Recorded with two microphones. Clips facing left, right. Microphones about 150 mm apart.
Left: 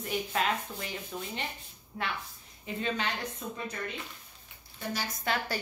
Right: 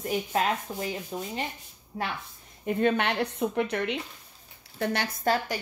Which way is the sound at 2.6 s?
55° right (ahead or behind).